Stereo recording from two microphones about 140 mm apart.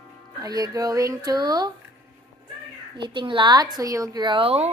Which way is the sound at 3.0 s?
35° right (ahead or behind).